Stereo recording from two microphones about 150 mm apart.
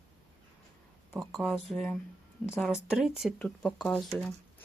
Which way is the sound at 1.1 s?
Centre (ahead or behind).